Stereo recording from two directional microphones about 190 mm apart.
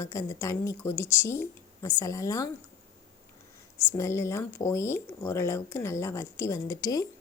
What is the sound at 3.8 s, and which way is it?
A woman's voice, 15° left (ahead or behind).